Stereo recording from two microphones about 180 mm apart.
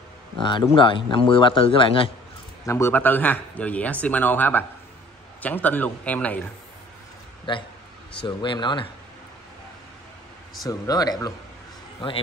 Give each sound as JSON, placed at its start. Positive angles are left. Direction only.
{"t": 0.4, "sound": "speech", "side_deg": 25}
{"t": 2.6, "sound": "speech", "side_deg": 15}
{"t": 7.5, "sound": "speech", "side_deg": 25}
{"t": 10.7, "sound": "speech", "side_deg": 20}